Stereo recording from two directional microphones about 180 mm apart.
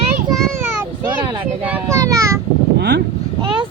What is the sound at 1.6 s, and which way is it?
Child singing, 15° right (ahead or behind).